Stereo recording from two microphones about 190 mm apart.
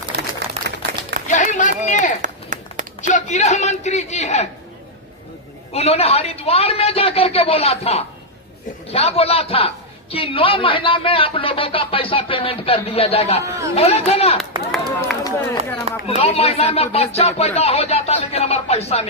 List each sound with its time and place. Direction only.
0.1 s a sound: 60° right (ahead or behind)
0.6 s a sound: 35° right (ahead or behind)
1.3 s run: 40° left (ahead or behind)
1.9 s speech: 40° left (ahead or behind)
2.2 s run: 40° right (ahead or behind)
3.1 s speech: 40° left (ahead or behind)
5.7 s a man's voice: 35° left (ahead or behind)
13.4 s speech: 15° right (ahead or behind)
13.7 s speech: 35° left (ahead or behind)
15.2 s speech: 15° left (ahead or behind)
16.0 s speech: 30° left (ahead or behind)